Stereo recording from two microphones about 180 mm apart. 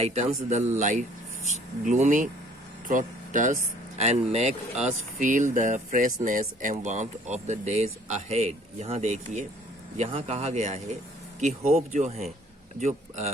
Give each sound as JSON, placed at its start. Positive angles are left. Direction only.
{"t": 0.0, "sound": "speech", "side_deg": -35}
{"t": 11.9, "sound": "speech", "side_deg": -40}